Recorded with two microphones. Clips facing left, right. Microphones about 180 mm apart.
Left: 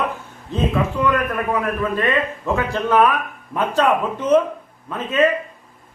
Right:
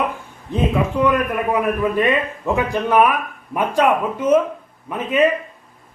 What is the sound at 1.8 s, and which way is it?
Speech, 15° right (ahead or behind).